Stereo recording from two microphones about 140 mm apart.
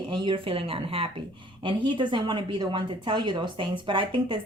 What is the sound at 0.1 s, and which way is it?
Speech, 35° right (ahead or behind).